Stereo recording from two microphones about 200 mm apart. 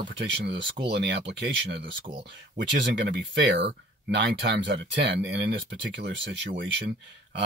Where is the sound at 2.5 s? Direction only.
60° right (ahead or behind).